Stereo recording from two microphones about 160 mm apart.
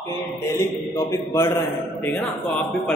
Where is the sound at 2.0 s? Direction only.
10° left (ahead or behind).